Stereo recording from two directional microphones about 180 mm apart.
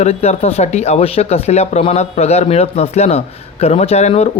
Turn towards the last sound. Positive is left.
turn(degrees=35)  # may be behind; listen again after turning